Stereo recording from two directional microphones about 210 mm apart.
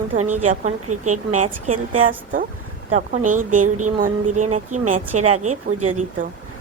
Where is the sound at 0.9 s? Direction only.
90° right.